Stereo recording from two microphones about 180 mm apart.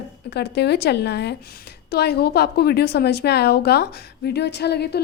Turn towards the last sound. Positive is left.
turn(degrees=65)  # may be behind; listen again after turning